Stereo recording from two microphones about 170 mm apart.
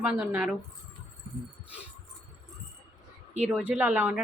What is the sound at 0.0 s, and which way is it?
Speech, 10° right (ahead or behind).